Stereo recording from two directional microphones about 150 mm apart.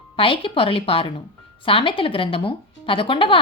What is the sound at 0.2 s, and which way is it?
Speech, 35° left (ahead or behind).